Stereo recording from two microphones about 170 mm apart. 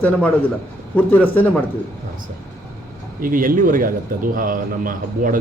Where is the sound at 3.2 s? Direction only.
55° right (ahead or behind).